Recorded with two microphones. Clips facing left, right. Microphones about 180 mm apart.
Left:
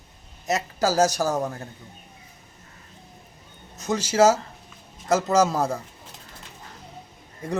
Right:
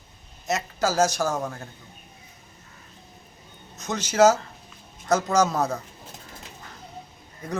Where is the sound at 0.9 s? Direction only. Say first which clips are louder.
Left 1 dB; 35° left (ahead or behind).